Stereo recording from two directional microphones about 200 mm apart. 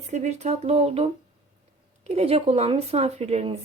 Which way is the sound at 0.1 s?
35° right (ahead or behind).